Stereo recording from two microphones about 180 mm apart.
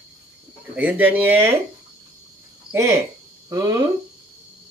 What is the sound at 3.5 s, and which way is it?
Speech, 20° right (ahead or behind).